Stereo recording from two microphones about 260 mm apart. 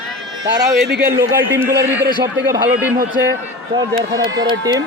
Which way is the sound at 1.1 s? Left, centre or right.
Centre.